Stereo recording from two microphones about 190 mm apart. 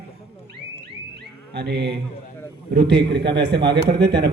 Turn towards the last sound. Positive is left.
turn(degrees=-60)  # may be behind; listen again after turning